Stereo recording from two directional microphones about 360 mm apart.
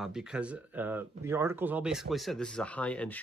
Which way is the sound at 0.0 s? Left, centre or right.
Centre.